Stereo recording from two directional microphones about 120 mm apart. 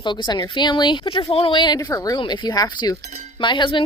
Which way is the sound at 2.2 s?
40° left (ahead or behind).